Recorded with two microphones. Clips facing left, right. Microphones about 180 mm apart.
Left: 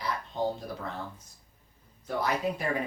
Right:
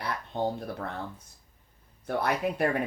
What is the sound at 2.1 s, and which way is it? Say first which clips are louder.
Speech: right 1 dB; 60° right (ahead or behind).